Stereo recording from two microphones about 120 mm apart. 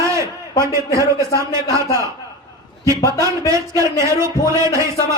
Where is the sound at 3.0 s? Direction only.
25° right (ahead or behind).